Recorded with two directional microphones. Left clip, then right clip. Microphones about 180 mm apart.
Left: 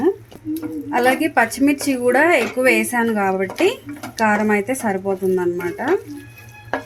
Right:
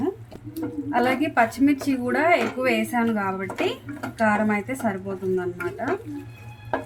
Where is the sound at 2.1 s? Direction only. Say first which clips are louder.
Left 3 dB; 45° left (ahead or behind).